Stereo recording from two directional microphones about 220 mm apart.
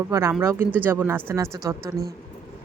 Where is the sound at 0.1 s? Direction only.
10° right (ahead or behind).